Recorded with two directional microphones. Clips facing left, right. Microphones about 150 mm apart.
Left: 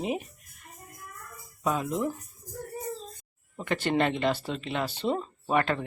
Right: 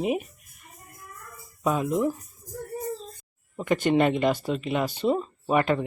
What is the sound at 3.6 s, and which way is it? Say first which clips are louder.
Speech: right 5 dB; 15° right (ahead or behind).